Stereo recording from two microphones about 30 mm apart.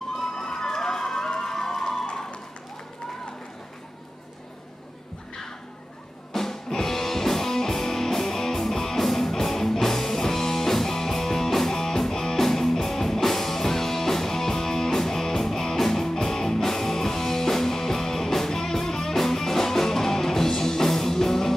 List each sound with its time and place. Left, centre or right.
0.4 s a sound: centre
1.4 s music: centre
6.3 s music: centre
12.4 s music: centre